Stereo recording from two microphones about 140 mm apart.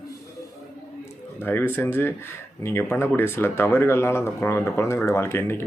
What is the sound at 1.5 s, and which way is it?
Speech, 15° left (ahead or behind).